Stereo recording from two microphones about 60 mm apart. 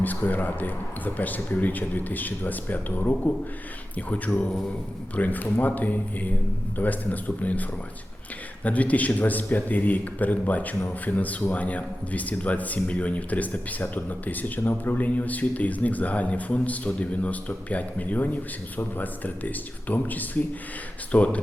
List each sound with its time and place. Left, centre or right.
0.0 s speech: left